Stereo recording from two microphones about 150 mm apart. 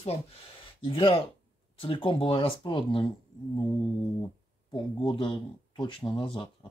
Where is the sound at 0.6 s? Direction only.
35° left (ahead or behind).